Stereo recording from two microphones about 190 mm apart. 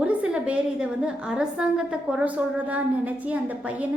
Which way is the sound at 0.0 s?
5° right (ahead or behind).